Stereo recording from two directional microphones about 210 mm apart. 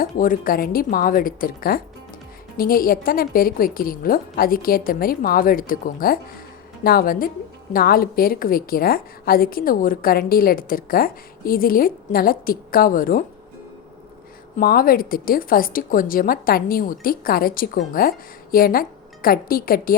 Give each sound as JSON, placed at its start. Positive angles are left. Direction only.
{"t": 0.0, "sound": "a woman's voice", "side_deg": 40}
{"t": 14.5, "sound": "a woman's voice", "side_deg": 45}